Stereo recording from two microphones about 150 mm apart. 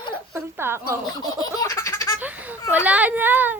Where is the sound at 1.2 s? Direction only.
25° left (ahead or behind).